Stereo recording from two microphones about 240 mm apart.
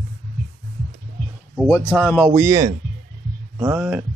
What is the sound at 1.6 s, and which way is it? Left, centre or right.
Speech, centre.